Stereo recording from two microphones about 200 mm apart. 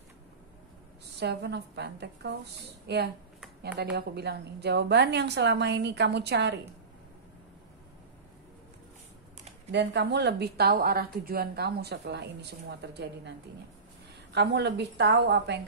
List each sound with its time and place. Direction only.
1.2 s a woman's voice: 55° right (ahead or behind)
9.7 s a woman's voice: 55° right (ahead or behind)
14.3 s a woman's voice: 60° right (ahead or behind)